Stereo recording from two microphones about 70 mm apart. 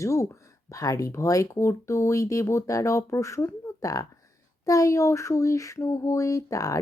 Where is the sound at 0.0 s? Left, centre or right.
Left.